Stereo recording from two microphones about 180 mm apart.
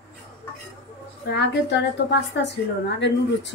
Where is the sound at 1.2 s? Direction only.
75° left (ahead or behind).